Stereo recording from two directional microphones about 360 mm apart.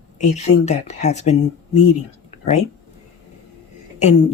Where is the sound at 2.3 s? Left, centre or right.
Centre.